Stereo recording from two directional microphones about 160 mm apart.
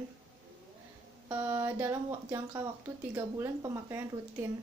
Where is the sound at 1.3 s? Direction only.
15° right (ahead or behind).